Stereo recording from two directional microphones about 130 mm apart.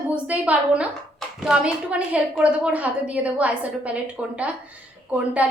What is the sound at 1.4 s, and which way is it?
A woman's voice, 5° right (ahead or behind).